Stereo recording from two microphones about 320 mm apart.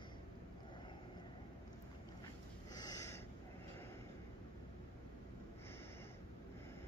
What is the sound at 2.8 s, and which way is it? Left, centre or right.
Snort, centre.